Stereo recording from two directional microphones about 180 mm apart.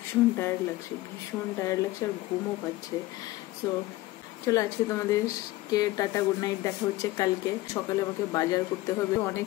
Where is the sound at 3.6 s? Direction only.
20° left (ahead or behind).